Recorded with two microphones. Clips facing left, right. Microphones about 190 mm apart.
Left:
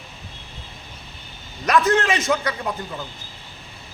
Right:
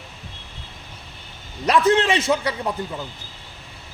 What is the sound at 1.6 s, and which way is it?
A man's voice, 30° right (ahead or behind).